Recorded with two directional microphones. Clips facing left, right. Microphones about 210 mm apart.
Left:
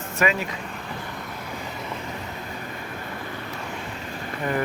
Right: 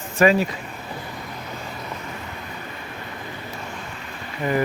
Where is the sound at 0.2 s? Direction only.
35° right (ahead or behind).